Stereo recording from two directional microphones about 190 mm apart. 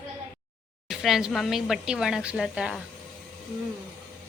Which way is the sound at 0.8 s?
Centre (ahead or behind).